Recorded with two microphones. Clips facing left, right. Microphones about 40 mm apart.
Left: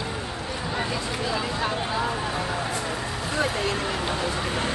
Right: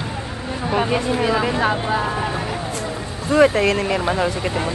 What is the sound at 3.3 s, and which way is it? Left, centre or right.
Speech, right.